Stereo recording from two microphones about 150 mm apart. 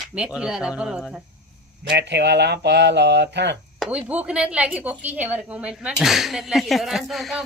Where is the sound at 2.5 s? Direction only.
90° right.